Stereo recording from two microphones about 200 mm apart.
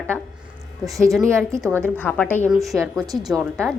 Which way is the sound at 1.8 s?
10° left (ahead or behind).